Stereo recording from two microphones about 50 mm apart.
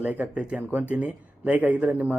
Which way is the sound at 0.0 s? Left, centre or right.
Right.